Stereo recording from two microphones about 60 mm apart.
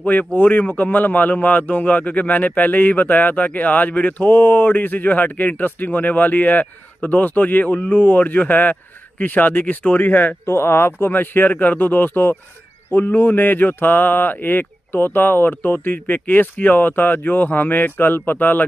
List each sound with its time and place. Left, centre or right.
0.0 s a man's voice: left
10.4 s speech: left